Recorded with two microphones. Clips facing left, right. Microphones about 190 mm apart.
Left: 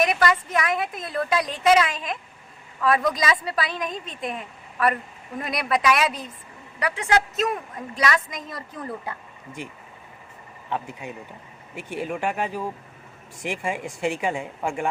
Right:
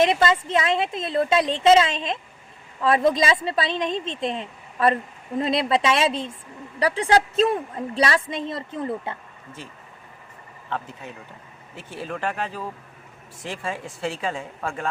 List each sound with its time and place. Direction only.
0.0 s a woman's voice: 25° right (ahead or behind)
9.6 s a woman's voice: 15° left (ahead or behind)